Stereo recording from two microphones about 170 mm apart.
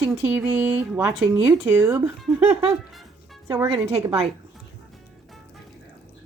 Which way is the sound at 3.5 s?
15° right (ahead or behind).